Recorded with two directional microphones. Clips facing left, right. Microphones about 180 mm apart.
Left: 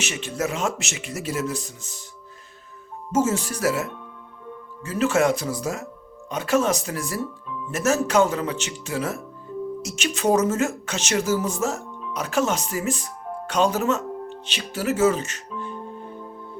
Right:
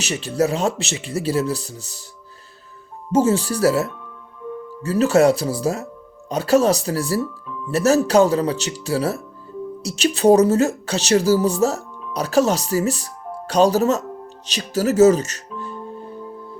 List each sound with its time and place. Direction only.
0.0 s speech: 35° right (ahead or behind)
3.1 s speech: 30° right (ahead or behind)
13.5 s music: 35° right (ahead or behind)